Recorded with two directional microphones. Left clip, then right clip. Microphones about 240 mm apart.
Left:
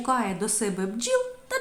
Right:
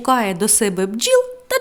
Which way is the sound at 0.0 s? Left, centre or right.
Right.